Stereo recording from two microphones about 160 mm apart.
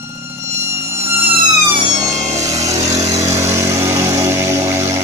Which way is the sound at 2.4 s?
20° right (ahead or behind).